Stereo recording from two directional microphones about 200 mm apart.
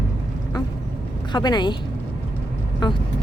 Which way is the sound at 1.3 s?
20° left (ahead or behind).